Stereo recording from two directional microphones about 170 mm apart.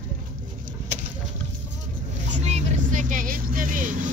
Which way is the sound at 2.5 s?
50° right (ahead or behind).